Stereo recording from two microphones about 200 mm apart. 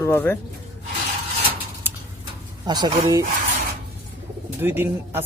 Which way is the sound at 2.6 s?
20° right (ahead or behind).